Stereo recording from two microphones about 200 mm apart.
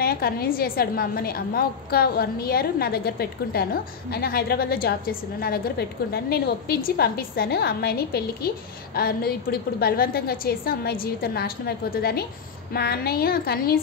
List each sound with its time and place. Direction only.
0.0 s a woman's voice: 50° left (ahead or behind)